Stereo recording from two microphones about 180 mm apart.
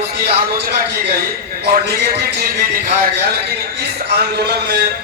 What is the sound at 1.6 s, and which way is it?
Speech, 65° right (ahead or behind).